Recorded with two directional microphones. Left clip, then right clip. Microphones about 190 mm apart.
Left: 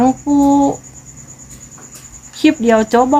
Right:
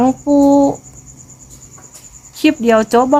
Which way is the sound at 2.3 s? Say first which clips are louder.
Even; 10° right (ahead or behind).